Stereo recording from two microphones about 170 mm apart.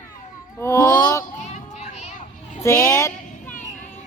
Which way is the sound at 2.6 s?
15° left (ahead or behind).